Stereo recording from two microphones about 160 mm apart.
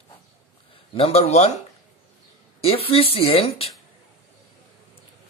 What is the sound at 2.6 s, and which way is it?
Speech, 35° left (ahead or behind).